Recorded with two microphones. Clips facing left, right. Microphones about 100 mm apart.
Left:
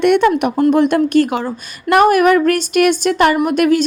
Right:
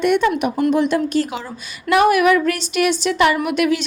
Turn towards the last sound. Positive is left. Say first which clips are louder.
# left 5 dB
turn(degrees=45)  # may be behind; listen again after turning